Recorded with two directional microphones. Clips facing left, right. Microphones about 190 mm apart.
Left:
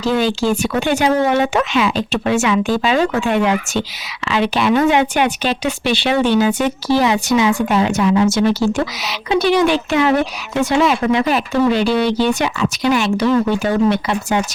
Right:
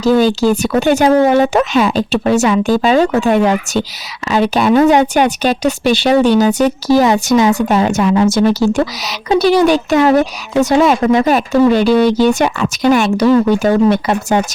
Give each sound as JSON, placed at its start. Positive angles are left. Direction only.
{"t": 0.0, "sound": "a woman's voice", "side_deg": -40}